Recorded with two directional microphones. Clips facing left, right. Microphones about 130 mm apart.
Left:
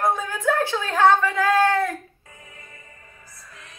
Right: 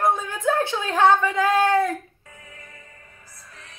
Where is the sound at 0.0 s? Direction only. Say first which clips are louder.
Right 1 dB; 25° right (ahead or behind).